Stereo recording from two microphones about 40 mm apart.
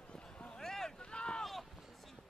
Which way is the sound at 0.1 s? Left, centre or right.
Left.